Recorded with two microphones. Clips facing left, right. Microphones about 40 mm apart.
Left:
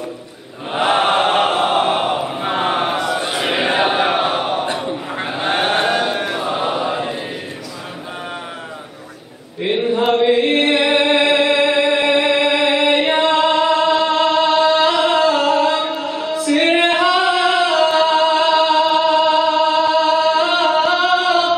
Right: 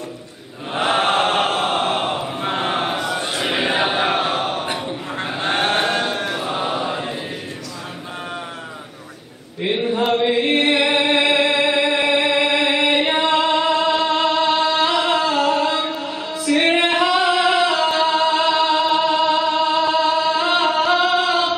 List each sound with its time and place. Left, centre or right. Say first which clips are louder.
0.7 s choir: left 3 dB; centre
4.7 s chant: left 3 dB; centre
9.6 s chant: left 3 dB; centre